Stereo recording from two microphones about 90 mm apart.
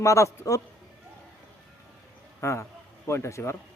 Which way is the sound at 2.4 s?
30° left (ahead or behind).